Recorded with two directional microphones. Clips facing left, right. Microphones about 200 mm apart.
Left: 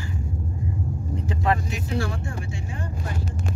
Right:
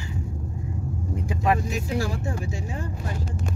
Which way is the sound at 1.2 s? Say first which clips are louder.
Right 1 dB; 10° right (ahead or behind).